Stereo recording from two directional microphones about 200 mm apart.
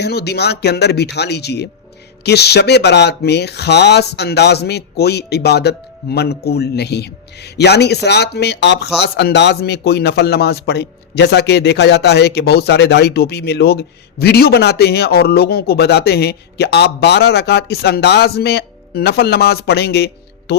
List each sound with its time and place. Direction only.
0.0 s a man's voice: 55° left (ahead or behind)